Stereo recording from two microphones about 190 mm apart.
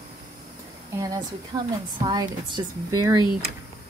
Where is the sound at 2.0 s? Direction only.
20° right (ahead or behind).